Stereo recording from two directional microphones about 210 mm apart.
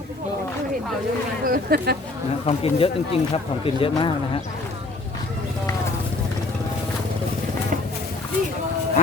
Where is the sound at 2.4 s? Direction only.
25° left (ahead or behind).